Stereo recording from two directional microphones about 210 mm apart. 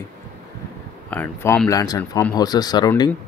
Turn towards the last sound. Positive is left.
turn(degrees=20)  # may be behind; listen again after turning